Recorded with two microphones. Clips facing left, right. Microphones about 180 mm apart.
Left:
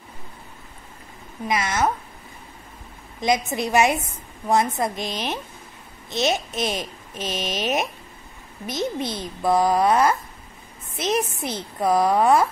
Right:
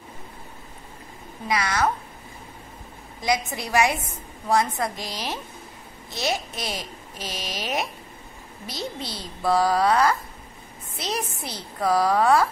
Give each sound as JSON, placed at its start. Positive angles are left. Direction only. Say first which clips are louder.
{"t": 1.5, "sound": "a child's voice", "louder": "left 1 dB", "side_deg": 20}
{"t": 3.2, "sound": "a child's voice", "louder": "left 3 dB", "side_deg": 20}